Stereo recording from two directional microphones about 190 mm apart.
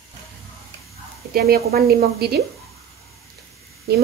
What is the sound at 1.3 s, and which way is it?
Speech, 55° right (ahead or behind).